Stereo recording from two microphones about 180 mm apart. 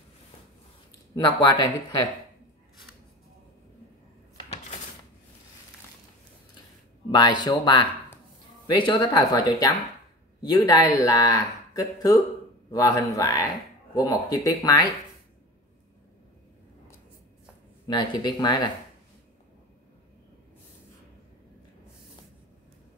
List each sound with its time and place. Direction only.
1.1 s speech: 25° left (ahead or behind)
7.1 s a man's voice: 25° left (ahead or behind)
17.8 s speech: 25° left (ahead or behind)